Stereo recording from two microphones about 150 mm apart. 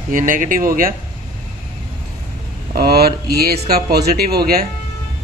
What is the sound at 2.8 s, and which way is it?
Speech, 90° right.